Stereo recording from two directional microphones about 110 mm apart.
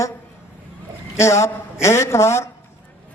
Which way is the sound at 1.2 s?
25° left (ahead or behind).